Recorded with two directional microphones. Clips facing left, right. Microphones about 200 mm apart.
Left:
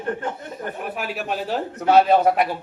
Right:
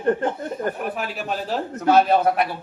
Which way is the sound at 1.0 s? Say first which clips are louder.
Left 1 dB; 5° left (ahead or behind).